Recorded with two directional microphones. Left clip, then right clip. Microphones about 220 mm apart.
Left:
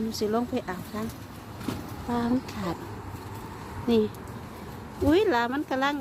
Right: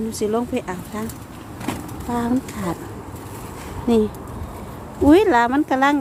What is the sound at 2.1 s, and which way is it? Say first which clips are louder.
Speech: right 5 dB; 5° right (ahead or behind).